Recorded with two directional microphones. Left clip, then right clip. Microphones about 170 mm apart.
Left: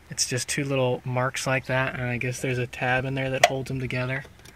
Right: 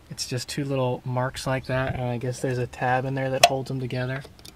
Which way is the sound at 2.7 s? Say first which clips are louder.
Right 1 dB; 10° left (ahead or behind).